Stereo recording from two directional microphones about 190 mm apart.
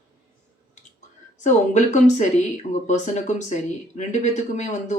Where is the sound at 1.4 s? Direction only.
40° left (ahead or behind).